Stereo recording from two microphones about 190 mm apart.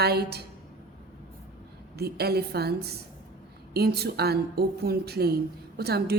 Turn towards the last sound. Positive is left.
turn(degrees=-55)  # may be behind; listen again after turning